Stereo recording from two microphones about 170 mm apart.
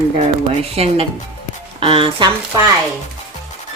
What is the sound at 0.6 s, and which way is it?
Speech, 35° right (ahead or behind).